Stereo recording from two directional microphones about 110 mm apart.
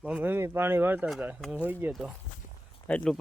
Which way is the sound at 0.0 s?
15° right (ahead or behind).